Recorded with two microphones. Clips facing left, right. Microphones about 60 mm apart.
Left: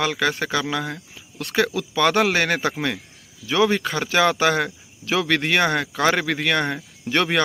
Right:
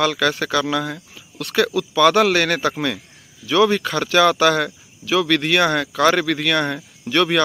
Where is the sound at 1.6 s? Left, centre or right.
Left.